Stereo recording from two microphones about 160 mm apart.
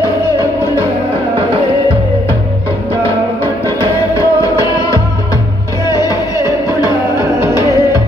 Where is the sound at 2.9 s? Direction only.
15° left (ahead or behind).